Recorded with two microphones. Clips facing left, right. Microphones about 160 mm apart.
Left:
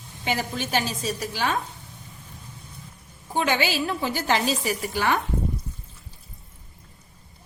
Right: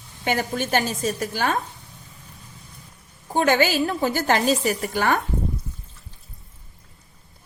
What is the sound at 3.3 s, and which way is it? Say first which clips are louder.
A woman's voice: right 5 dB; 45° right (ahead or behind).